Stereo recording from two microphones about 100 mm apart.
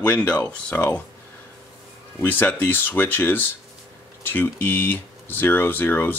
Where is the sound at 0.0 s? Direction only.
15° left (ahead or behind).